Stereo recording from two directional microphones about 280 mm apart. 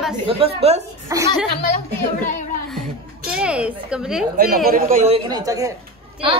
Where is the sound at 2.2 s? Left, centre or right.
Left.